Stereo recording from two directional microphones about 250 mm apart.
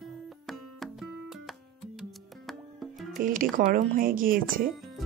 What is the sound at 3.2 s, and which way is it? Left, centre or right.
Speech, right.